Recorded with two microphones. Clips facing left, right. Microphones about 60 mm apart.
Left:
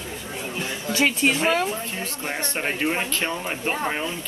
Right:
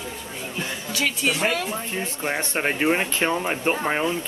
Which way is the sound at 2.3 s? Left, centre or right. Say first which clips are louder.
Right 3 dB; centre.